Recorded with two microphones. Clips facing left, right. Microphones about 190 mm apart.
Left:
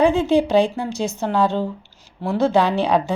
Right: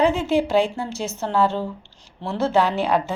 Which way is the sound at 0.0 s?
15° left (ahead or behind).